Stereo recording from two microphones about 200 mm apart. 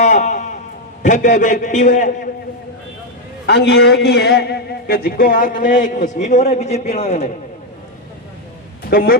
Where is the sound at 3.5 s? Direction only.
55° left (ahead or behind); by 7.3 s 30° left (ahead or behind).